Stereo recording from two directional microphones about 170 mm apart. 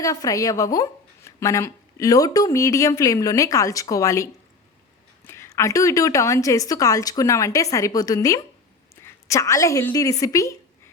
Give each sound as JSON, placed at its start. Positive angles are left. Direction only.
{"t": 0.0, "sound": "a woman's voice", "side_deg": 20}